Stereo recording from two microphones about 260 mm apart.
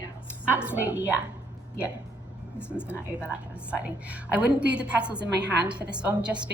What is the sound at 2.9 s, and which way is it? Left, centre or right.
A woman's voice, centre.